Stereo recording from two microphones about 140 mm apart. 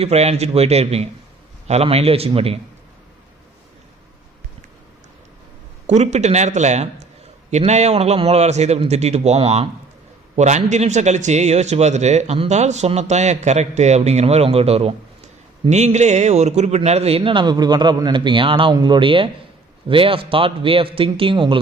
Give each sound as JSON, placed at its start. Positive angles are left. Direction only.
{"t": 0.0, "sound": "a man's voice", "side_deg": -50}
{"t": 5.9, "sound": "a man's voice", "side_deg": -55}